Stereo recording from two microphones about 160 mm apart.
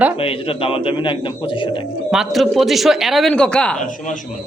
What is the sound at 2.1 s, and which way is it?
Speech, centre (ahead or behind).